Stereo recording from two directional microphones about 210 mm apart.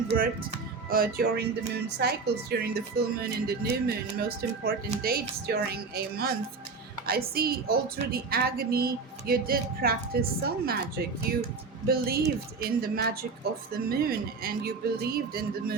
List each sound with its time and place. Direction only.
0.9 s a woman's voice: 45° right (ahead or behind)